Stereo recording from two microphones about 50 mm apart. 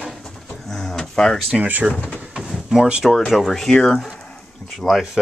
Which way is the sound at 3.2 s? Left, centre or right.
Centre.